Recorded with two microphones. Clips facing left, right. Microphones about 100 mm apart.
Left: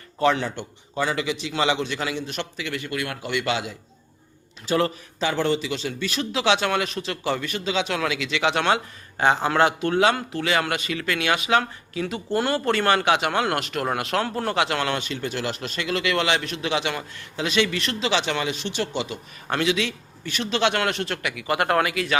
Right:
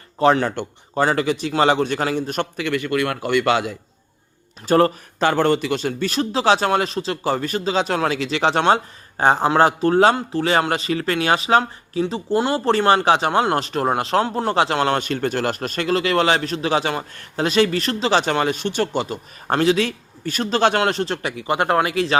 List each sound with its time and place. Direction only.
0.2 s a man's voice: 40° right (ahead or behind)
0.4 s a man's voice: 50° right (ahead or behind); by 14.9 s 30° right (ahead or behind)
14.9 s a man's voice: 50° right (ahead or behind); by 22.2 s 30° right (ahead or behind)